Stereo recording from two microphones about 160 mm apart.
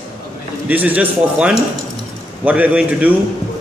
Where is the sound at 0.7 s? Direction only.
10° right (ahead or behind).